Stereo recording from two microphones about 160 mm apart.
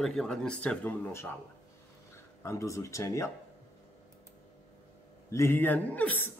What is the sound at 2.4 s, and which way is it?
Speech, 20° left (ahead or behind).